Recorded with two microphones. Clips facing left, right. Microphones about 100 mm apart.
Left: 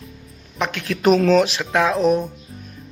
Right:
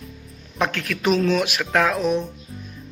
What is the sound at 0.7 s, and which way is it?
Speech, 20° left (ahead or behind).